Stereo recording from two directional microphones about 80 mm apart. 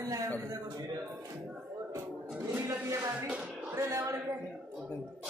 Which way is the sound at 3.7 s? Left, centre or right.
Right.